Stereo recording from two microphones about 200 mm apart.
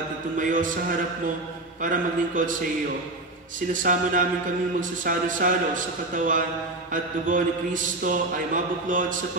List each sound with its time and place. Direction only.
0.4 s a man's voice: 40° right (ahead or behind)
1.8 s a man's voice: 40° right (ahead or behind)
3.7 s a man's voice: 40° right (ahead or behind)